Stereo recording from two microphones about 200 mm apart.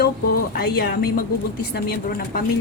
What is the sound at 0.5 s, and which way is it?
A woman's voice, 55° left (ahead or behind).